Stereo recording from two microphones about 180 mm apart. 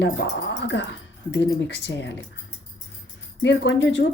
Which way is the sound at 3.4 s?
90° left.